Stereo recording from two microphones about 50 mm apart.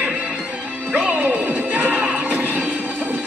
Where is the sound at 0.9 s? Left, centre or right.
Right.